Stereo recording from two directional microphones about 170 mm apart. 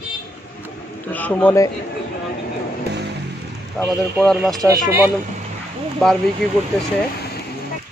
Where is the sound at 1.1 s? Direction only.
10° left (ahead or behind).